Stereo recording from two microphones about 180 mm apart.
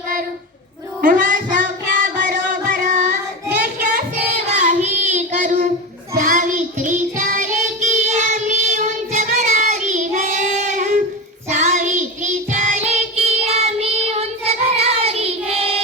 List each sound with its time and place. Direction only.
1.0 s child singing: 50° right (ahead or behind)
2.2 s music: 50° right (ahead or behind)
4.5 s child singing: 40° right (ahead or behind)